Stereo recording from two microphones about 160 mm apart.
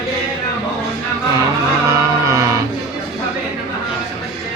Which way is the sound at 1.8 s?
20° right (ahead or behind).